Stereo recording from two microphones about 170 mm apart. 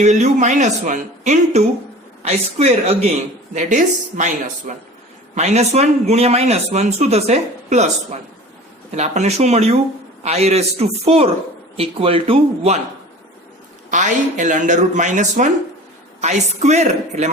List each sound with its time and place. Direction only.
0.0 s a man's voice: 45° right (ahead or behind)
4.1 s a man's voice: 50° right (ahead or behind)
13.9 s speech: 45° right (ahead or behind)